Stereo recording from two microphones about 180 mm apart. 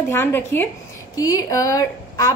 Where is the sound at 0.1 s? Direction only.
15° left (ahead or behind).